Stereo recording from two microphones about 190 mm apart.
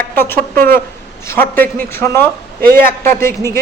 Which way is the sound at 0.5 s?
50° right (ahead or behind).